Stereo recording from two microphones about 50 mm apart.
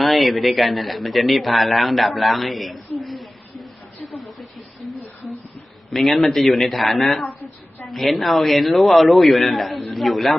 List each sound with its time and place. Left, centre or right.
0.0 s speech: centre
5.9 s a man's voice: centre